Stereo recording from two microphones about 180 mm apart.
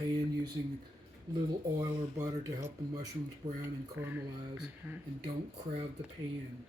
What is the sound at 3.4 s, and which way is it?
Speech, 40° right (ahead or behind).